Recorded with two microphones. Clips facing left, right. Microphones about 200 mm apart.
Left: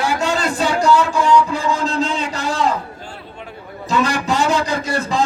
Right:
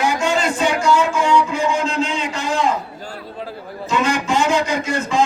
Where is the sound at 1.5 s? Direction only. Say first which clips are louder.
Right 2 dB; 35° left (ahead or behind).